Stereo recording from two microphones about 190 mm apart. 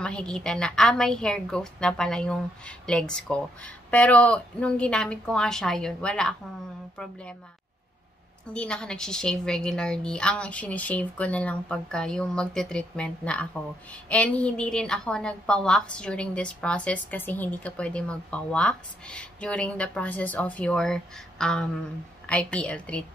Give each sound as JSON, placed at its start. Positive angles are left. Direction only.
{"t": 0.0, "sound": "a woman's voice", "side_deg": 5}
{"t": 8.5, "sound": "a woman's voice", "side_deg": 5}